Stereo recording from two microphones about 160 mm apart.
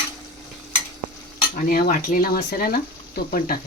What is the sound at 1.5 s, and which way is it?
Cutlery, 60° left (ahead or behind).